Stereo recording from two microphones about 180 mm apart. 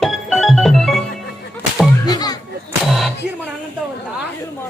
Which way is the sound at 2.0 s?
20° left (ahead or behind).